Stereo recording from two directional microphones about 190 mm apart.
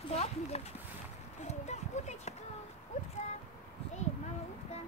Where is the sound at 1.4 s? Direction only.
35° left (ahead or behind).